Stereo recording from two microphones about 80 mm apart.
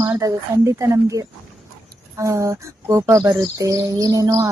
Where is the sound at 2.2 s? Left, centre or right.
Right.